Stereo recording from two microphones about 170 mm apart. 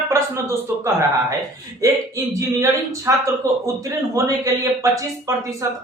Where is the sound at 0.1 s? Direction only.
15° right (ahead or behind).